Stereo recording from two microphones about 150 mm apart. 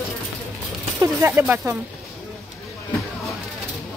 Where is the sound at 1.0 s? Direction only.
15° right (ahead or behind).